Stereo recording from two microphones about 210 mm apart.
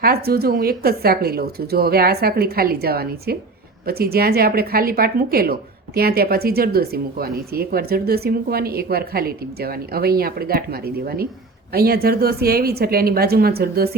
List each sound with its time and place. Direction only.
0.0 s a woman's voice: 45° right (ahead or behind)